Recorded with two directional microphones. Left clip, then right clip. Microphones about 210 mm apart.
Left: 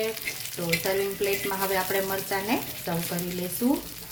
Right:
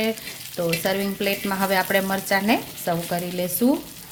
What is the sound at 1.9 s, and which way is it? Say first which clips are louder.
Speech: right 6 dB; 50° right (ahead or behind).